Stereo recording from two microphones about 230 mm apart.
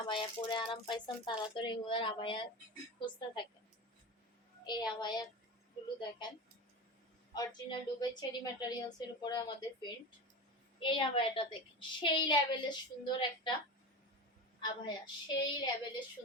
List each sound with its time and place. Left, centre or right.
0.1 s a woman's voice: left
4.6 s a woman's voice: centre
7.3 s a woman's voice: centre
14.6 s a woman's voice: centre